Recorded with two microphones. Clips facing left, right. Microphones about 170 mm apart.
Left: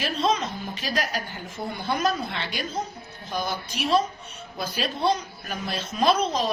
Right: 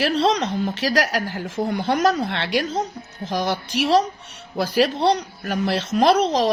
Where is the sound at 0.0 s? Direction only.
85° right.